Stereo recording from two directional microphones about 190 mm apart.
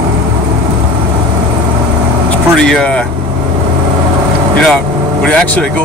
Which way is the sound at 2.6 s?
5° left (ahead or behind).